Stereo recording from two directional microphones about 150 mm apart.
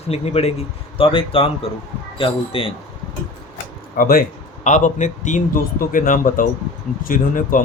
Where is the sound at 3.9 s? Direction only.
75° left (ahead or behind).